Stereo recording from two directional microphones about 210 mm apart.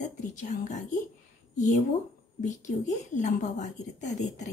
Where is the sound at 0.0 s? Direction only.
35° left (ahead or behind).